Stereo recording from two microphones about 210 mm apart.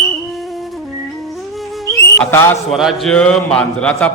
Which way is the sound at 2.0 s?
10° left (ahead or behind).